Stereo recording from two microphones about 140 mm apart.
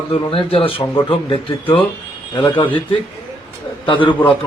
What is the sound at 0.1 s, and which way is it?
A man's voice, 40° left (ahead or behind).